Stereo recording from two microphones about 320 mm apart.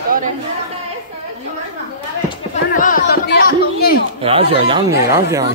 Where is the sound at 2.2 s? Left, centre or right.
Left.